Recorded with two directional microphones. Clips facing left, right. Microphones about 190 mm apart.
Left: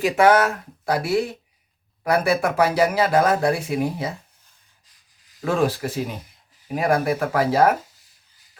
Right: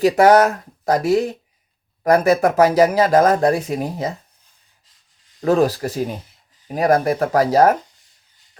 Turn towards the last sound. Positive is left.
turn(degrees=-40)  # may be behind; listen again after turning